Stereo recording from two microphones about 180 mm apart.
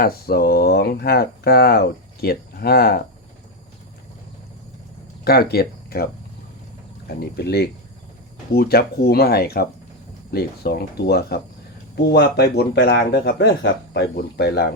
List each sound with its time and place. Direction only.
0.0 s speech: 60° left (ahead or behind)
5.2 s speech: 60° left (ahead or behind)
7.2 s speech: 60° left (ahead or behind)